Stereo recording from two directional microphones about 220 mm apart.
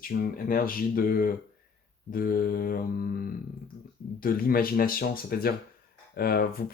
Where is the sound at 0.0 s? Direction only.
40° left (ahead or behind).